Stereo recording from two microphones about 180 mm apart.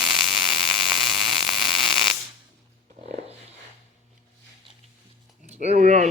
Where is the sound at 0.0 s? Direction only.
Centre (ahead or behind).